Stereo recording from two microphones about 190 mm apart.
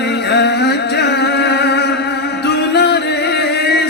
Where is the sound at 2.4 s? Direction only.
60° left (ahead or behind).